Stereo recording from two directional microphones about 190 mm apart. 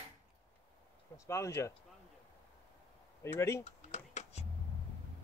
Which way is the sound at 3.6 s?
35° left (ahead or behind).